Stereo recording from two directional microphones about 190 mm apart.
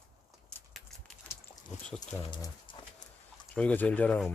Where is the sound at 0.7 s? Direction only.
Centre (ahead or behind).